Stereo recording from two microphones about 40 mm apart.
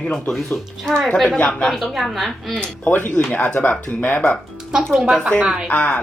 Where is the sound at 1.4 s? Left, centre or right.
Centre.